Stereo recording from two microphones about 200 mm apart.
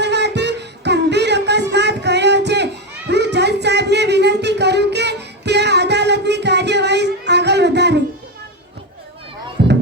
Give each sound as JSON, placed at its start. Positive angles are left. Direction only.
{"t": 0.0, "sound": "music", "side_deg": -60}
{"t": 3.1, "sound": "a sound", "side_deg": -60}
{"t": 9.6, "sound": "music", "side_deg": -55}